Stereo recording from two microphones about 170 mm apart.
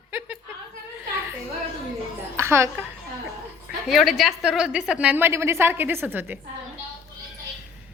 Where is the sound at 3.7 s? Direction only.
Centre (ahead or behind).